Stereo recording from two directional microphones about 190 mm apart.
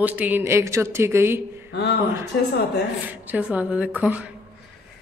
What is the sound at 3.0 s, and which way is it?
Speech, 10° right (ahead or behind).